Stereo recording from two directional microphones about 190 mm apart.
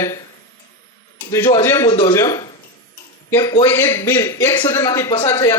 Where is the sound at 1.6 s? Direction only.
15° left (ahead or behind).